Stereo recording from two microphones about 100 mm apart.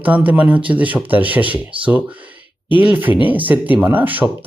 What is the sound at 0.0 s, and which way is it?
Speech, 15° right (ahead or behind).